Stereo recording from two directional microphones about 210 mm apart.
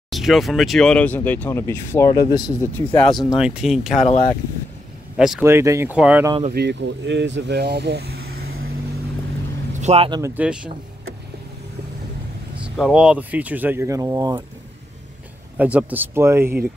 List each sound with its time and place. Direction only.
0.1 s speech: centre (ahead or behind); by 2.7 s 20° left (ahead or behind)
2.9 s speech: centre (ahead or behind)
4.0 s speech: 30° left (ahead or behind)
5.1 s speech: centre (ahead or behind)
6.5 s speech: 55° right (ahead or behind)
9.8 s speech: 30° right (ahead or behind)
10.2 s speech: 5° right (ahead or behind)
12.6 s speech: 5° right (ahead or behind)
15.5 s speech: 5° right (ahead or behind)